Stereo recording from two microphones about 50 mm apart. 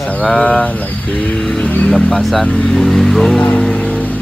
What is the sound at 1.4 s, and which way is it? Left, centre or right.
Speech, centre.